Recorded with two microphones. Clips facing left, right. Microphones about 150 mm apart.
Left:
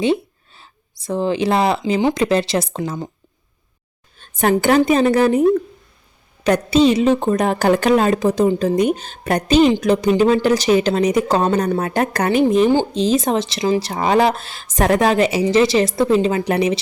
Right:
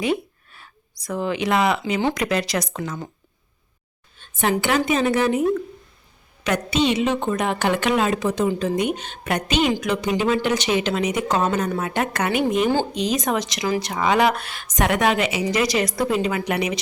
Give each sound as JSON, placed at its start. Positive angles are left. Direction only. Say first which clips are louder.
{"t": 0.0, "sound": "a sound", "louder": "left 5 dB", "side_deg": 25}
{"t": 2.0, "sound": "speech", "louder": "left 5 dB", "side_deg": 15}
{"t": 2.2, "sound": "speech", "louder": "left 6 dB", "side_deg": 30}
{"t": 4.2, "sound": "a woman's voice", "louder": "left 5 dB", "side_deg": 45}